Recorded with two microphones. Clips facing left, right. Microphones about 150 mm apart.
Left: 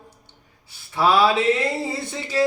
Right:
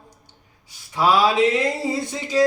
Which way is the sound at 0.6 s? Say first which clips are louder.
Even; 15° right (ahead or behind).